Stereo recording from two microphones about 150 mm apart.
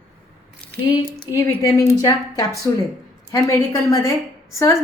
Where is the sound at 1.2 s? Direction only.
20° left (ahead or behind).